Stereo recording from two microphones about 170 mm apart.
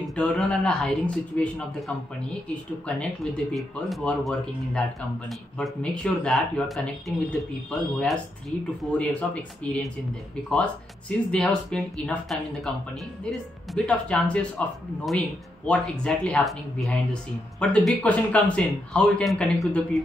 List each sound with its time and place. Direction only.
0.0 s speech: 5° left (ahead or behind)
2.9 s speech: 5° left (ahead or behind)